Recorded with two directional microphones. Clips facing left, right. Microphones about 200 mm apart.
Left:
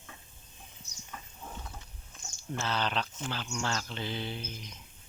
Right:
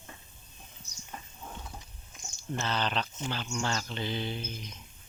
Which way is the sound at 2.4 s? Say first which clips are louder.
Right 1 dB; 5° left (ahead or behind).